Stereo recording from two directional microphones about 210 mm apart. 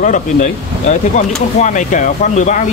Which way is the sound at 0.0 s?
35° left (ahead or behind).